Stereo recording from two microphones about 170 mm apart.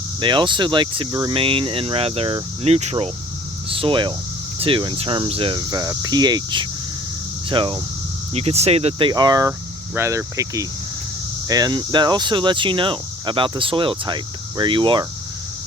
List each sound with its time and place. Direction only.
0.2 s speech: 25° right (ahead or behind)